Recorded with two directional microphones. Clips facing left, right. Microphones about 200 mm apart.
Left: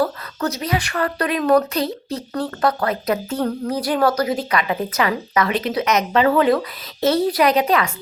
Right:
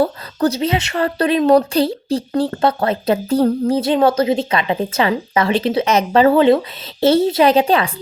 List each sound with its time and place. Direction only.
0.0 s speech: 30° right (ahead or behind)